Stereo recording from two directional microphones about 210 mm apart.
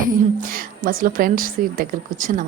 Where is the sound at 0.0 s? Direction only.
40° right (ahead or behind).